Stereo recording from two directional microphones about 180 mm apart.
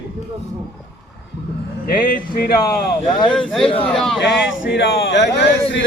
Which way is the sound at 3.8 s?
5° left (ahead or behind).